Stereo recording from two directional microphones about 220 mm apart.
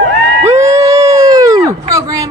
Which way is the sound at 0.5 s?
15° right (ahead or behind).